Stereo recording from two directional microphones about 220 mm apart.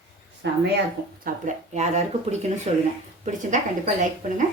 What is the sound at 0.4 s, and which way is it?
Speech, 55° right (ahead or behind).